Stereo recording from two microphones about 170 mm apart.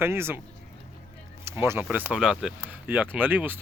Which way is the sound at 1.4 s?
15° right (ahead or behind).